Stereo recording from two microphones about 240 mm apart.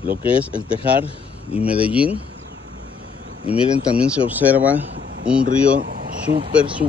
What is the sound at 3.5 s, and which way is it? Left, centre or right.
Speech, centre.